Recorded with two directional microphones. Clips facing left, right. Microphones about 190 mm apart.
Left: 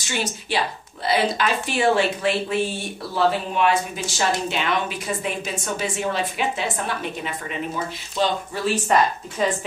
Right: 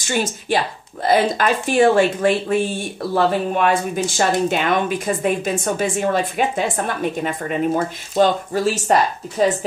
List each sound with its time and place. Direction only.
0.0 s speech: 50° right (ahead or behind)